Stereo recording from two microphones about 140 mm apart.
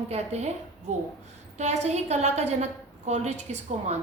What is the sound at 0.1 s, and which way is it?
Speech, 50° right (ahead or behind).